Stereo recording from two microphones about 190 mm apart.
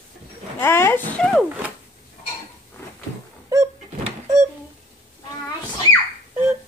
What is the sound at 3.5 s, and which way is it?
Cupboard open or close, 15° right (ahead or behind).